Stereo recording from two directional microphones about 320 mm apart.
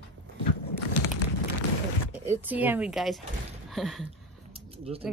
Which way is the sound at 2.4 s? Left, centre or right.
Centre.